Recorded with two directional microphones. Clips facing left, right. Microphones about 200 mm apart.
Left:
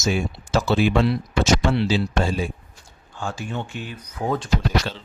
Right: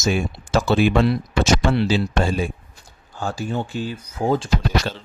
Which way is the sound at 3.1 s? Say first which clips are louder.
Right 4 dB; 40° right (ahead or behind).